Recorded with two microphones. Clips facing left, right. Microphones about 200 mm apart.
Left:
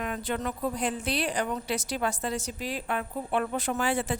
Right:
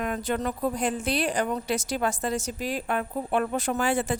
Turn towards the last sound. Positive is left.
turn(degrees=-45)  # may be behind; listen again after turning